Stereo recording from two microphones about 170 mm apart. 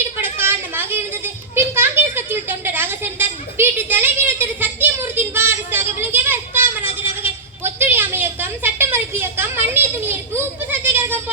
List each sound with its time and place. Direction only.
0.2 s children playing: 10° right (ahead or behind)